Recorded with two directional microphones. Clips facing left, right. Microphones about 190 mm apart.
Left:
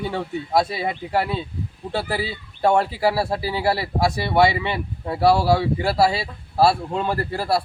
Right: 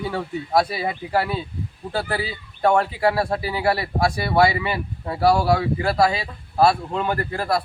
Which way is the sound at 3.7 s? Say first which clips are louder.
Right 1 dB; 25° left (ahead or behind).